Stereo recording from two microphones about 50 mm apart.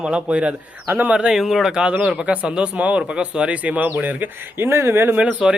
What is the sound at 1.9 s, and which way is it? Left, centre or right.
Speech, right.